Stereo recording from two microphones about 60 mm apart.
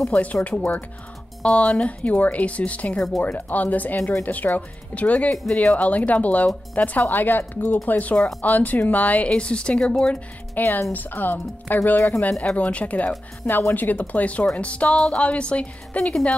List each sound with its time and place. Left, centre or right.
0.1 s speech: left
9.3 s speech: centre
10.6 s speech: left